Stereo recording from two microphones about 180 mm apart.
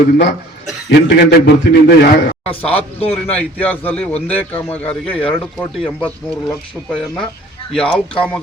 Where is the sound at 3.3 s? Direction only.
10° left (ahead or behind).